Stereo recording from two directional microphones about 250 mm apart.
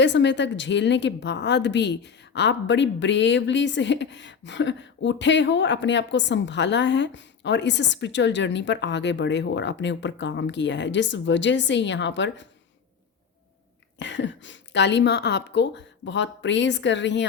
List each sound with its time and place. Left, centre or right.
0.0 s a woman's voice: left
14.0 s a woman's voice: left